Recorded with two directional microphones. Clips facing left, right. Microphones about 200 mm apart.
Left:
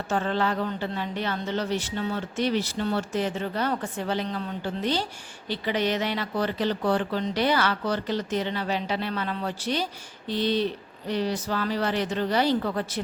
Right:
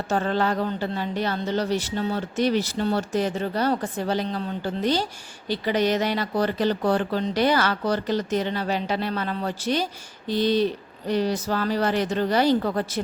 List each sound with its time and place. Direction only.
0.1 s a woman's voice: 40° right (ahead or behind)